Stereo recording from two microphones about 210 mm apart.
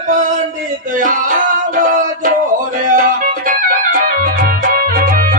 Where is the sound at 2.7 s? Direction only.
40° right (ahead or behind).